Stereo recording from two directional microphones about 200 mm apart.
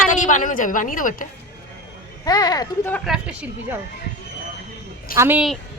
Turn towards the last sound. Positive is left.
turn(degrees=-10)  # may be behind; listen again after turning